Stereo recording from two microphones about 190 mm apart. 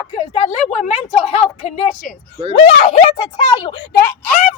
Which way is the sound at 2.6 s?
30° left (ahead or behind).